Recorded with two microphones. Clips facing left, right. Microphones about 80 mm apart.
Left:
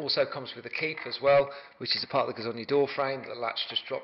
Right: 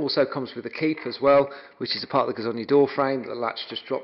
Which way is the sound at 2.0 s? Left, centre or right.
Right.